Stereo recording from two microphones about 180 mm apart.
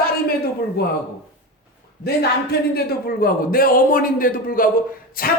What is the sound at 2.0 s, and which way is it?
A man's voice, 60° left (ahead or behind).